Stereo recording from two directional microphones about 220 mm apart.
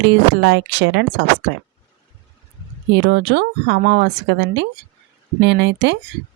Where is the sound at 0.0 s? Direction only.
50° right (ahead or behind).